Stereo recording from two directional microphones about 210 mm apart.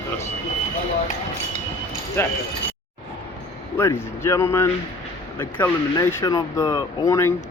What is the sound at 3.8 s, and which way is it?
Speech, 10° left (ahead or behind).